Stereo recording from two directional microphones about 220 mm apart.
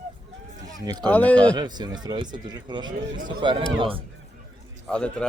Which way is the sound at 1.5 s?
20° right (ahead or behind).